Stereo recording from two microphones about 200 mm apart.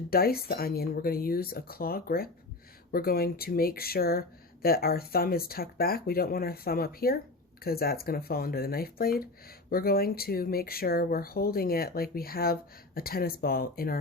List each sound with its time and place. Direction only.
0.1 s speech: 50° left (ahead or behind)